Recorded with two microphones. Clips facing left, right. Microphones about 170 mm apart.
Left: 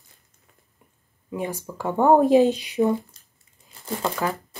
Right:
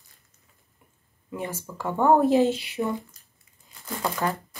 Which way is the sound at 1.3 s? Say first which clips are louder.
Left 4 dB; 15° left (ahead or behind).